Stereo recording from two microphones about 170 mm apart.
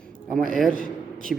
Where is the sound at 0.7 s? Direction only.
55° right (ahead or behind).